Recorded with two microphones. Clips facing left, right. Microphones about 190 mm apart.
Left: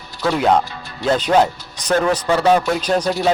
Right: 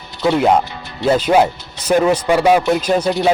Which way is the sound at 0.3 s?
10° right (ahead or behind).